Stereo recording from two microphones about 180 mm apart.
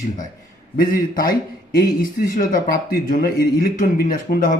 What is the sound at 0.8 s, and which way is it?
Speech, 50° left (ahead or behind).